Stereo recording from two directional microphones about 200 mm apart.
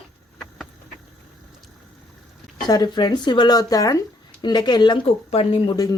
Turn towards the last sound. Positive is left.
turn(degrees=25)  # may be behind; listen again after turning